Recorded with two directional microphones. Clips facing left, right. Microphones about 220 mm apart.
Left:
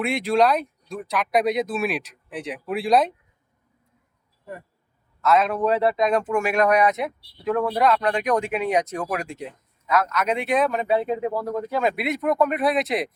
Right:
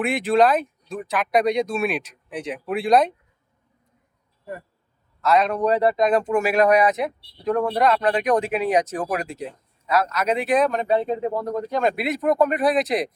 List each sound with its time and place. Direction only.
0.0 s speech: centre (ahead or behind)
5.2 s speech: centre (ahead or behind)
8.4 s speech: 35° right (ahead or behind)
8.7 s speech: centre (ahead or behind)
9.1 s speech: 35° right (ahead or behind)
10.3 s speech: centre (ahead or behind)